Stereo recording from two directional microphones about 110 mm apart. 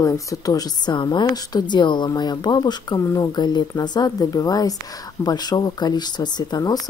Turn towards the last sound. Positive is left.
turn(degrees=35)  # may be behind; listen again after turning